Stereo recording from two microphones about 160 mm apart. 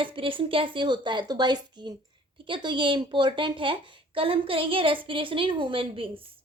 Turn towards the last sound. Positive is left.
turn(degrees=-35)  # may be behind; listen again after turning